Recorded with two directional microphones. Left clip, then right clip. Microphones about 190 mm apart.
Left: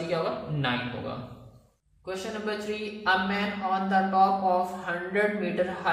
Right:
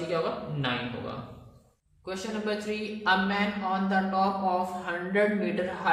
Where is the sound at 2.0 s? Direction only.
25° right (ahead or behind).